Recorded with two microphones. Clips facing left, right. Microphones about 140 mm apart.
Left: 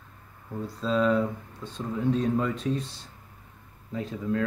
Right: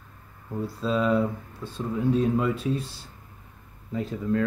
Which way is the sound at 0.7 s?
5° right (ahead or behind).